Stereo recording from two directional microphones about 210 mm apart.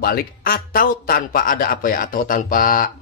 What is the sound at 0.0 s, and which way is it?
Speech, 45° left (ahead or behind).